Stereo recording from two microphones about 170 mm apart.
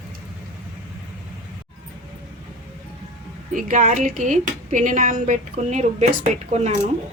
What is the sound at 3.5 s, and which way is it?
Speech, 50° right (ahead or behind).